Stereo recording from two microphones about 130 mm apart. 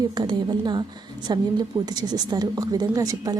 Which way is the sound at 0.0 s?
35° right (ahead or behind).